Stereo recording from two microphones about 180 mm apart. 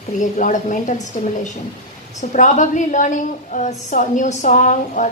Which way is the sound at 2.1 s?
45° left (ahead or behind).